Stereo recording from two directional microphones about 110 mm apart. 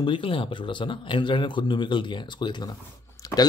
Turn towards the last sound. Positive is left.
turn(degrees=30)  # may be behind; listen again after turning